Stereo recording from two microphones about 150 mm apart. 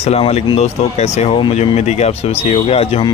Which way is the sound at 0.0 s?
45° left (ahead or behind).